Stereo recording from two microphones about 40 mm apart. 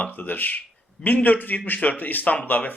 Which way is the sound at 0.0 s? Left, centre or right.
Left.